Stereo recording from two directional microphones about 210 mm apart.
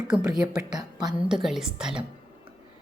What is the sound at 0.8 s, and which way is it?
Speech, 20° right (ahead or behind).